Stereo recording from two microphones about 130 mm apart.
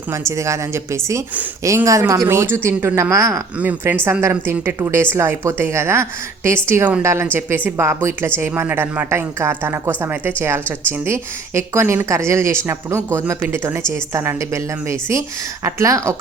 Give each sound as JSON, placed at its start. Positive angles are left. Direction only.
{"t": 0.1, "sound": "a woman's voice", "side_deg": -20}
{"t": 3.6, "sound": "a woman's voice", "side_deg": -15}